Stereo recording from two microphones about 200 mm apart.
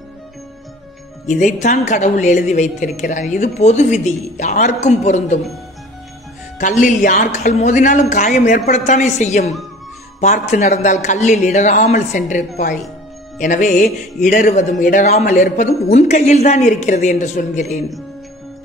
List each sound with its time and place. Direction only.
1.2 s speech: 40° left (ahead or behind)
6.6 s speech: 40° left (ahead or behind)